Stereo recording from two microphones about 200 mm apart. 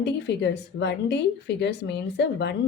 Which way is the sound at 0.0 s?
60° left (ahead or behind).